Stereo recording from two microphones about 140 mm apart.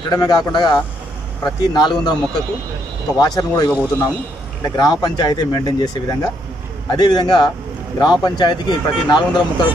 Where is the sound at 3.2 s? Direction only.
30° left (ahead or behind).